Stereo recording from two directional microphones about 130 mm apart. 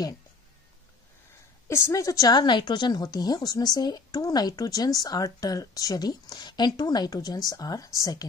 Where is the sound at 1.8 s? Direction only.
25° left (ahead or behind).